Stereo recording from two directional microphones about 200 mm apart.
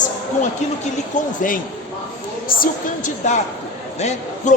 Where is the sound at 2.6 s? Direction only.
40° left (ahead or behind).